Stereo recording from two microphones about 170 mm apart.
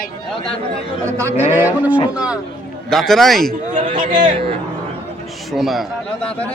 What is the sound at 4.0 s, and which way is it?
Speech, 50° right (ahead or behind).